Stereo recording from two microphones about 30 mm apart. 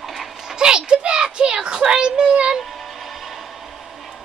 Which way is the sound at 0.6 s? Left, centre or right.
Right.